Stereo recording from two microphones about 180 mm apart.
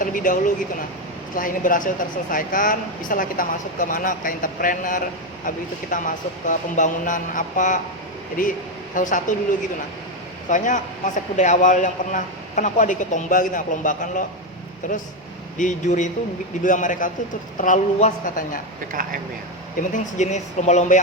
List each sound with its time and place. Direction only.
0.0 s a sound: 50° left (ahead or behind)
1.4 s a man's voice: 50° left (ahead or behind)
10.5 s a man's voice: 45° left (ahead or behind)
15.5 s a man's voice: 45° left (ahead or behind)
18.9 s speech: 50° right (ahead or behind)
19.9 s a woman's voice: 40° left (ahead or behind)